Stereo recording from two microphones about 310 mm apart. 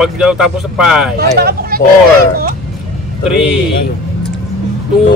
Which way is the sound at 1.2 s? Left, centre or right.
Right.